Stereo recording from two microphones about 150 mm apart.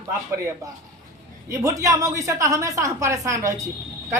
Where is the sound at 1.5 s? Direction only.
20° right (ahead or behind).